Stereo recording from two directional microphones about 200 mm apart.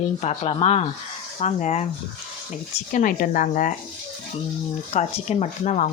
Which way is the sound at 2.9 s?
40° left (ahead or behind).